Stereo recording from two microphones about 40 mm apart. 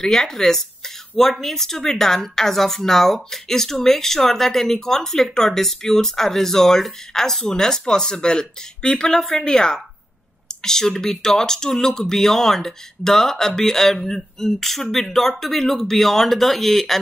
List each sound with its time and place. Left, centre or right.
0.0 s a woman's voice: centre